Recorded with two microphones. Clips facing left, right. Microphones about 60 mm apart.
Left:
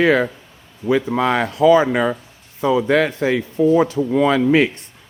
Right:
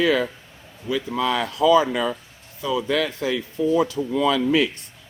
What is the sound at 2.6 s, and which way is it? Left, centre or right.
A man's voice, left.